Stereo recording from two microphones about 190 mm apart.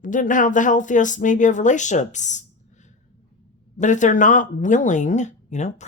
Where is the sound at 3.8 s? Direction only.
40° left (ahead or behind).